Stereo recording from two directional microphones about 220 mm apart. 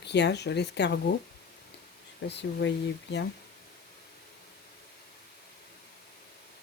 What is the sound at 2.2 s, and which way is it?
Speech, 50° left (ahead or behind).